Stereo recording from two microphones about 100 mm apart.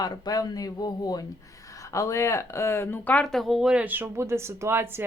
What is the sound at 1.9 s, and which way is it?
Speech, 30° left (ahead or behind).